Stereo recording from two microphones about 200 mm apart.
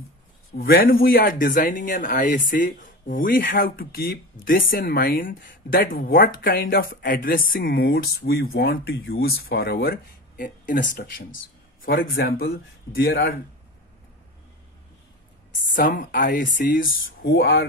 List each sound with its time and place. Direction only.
0.6 s speech: 45° left (ahead or behind)
15.7 s speech: 45° left (ahead or behind)